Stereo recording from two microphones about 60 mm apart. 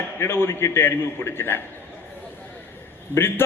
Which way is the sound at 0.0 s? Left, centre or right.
Left.